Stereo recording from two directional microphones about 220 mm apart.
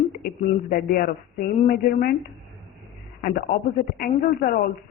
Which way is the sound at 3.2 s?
40° left (ahead or behind).